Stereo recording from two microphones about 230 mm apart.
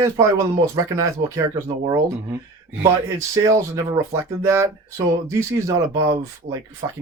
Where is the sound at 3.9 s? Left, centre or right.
Centre.